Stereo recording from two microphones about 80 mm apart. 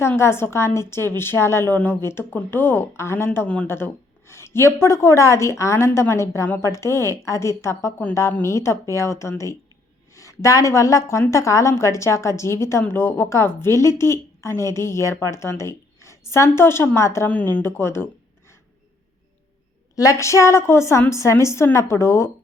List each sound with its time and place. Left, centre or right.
0.2 s a woman's voice: left
17.2 s speech: left
20.0 s a woman's voice: left